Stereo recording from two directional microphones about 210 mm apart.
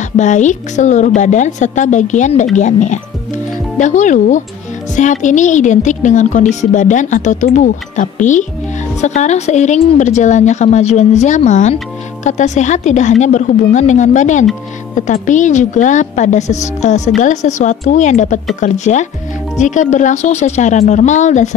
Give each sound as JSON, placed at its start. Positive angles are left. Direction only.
{"t": 0.2, "sound": "a woman's voice", "side_deg": 35}